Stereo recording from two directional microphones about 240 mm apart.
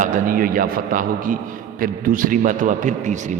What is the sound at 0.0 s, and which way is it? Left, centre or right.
A man's voice, right.